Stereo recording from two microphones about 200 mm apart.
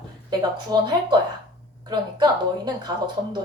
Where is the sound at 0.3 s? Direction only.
20° right (ahead or behind).